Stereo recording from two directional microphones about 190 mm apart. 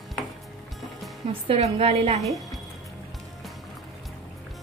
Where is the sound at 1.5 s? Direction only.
30° right (ahead or behind).